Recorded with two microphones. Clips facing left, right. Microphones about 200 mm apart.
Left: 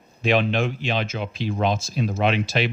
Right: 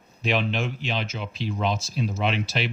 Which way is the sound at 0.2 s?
50° left (ahead or behind).